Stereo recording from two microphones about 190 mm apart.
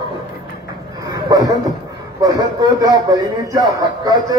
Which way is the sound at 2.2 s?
20° right (ahead or behind).